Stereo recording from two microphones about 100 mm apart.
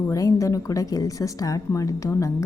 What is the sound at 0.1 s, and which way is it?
A woman's voice, 35° left (ahead or behind).